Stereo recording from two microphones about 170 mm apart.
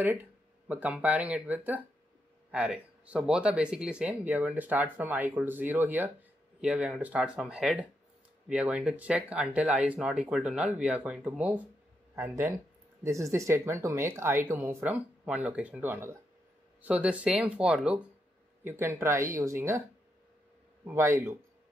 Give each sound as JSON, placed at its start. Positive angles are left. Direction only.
{"t": 0.7, "sound": "speech", "side_deg": -10}
{"t": 20.8, "sound": "speech", "side_deg": -15}